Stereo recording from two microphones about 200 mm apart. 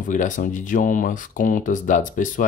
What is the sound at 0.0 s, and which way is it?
Speech, 40° left (ahead or behind).